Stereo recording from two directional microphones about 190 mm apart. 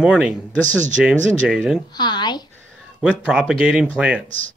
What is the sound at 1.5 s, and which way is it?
Speech, 5° right (ahead or behind).